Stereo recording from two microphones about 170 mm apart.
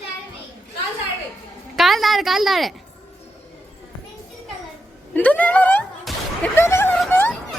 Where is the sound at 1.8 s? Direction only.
Centre (ahead or behind).